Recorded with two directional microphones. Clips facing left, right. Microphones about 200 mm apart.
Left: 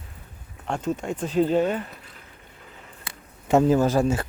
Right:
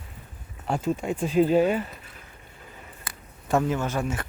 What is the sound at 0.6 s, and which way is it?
Speech, 5° right (ahead or behind).